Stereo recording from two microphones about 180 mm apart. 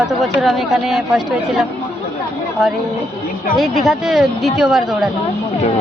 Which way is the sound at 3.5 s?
Centre (ahead or behind).